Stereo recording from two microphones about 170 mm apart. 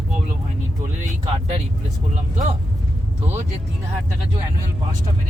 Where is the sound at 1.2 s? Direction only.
35° right (ahead or behind).